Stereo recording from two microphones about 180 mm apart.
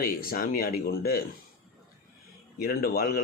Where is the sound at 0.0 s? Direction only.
55° left (ahead or behind).